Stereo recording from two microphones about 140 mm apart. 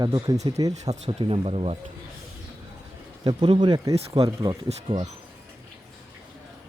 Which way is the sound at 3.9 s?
45° right (ahead or behind).